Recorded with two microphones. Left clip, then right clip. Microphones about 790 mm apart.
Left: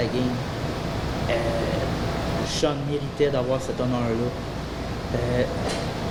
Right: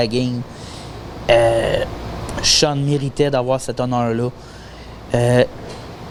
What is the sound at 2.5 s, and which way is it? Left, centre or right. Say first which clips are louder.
Speech: right 11 dB; right.